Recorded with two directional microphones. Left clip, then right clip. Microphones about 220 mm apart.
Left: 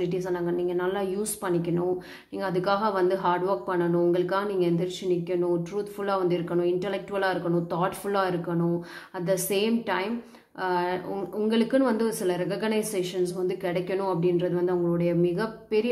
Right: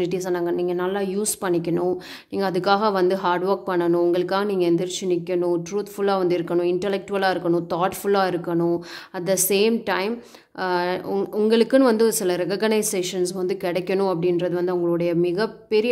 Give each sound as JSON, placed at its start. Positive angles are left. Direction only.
{"t": 0.0, "sound": "speech", "side_deg": -45}